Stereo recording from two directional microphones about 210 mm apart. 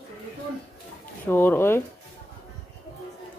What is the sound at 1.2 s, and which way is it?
Speech, 10° left (ahead or behind).